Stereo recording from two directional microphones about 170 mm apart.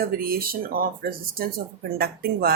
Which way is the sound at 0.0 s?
60° right (ahead or behind).